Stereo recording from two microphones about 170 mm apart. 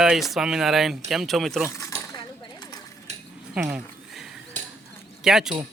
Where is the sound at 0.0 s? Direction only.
Centre (ahead or behind).